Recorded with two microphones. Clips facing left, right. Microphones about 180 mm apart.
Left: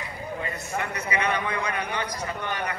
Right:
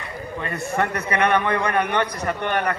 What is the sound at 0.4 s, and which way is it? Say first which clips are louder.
A man's voice: right 9 dB; 65° right (ahead or behind).